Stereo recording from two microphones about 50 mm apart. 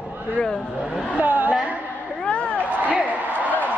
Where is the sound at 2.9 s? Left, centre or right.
Right.